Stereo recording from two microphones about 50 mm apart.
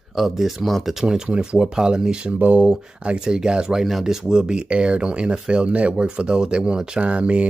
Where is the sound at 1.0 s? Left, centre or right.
Centre.